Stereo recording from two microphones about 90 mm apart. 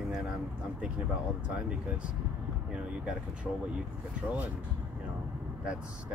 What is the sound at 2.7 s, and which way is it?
Speech, 10° right (ahead or behind).